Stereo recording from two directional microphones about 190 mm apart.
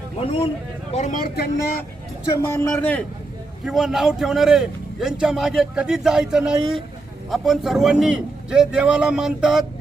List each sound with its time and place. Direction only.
0.2 s speech: 30° left (ahead or behind)
0.9 s speech: 40° left (ahead or behind)
2.5 s a man's voice: 5° left (ahead or behind)